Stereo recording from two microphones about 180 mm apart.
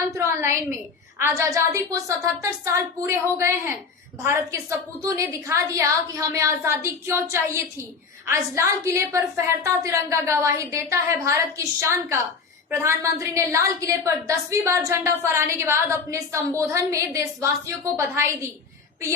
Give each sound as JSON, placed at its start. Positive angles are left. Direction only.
{"t": 0.1, "sound": "a woman's voice", "side_deg": -15}